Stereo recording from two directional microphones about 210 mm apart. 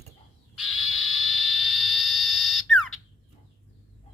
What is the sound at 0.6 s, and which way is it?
Frog, centre (ahead or behind).